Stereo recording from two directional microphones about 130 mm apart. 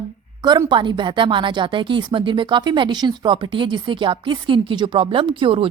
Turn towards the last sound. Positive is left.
turn(degrees=-40)  # may be behind; listen again after turning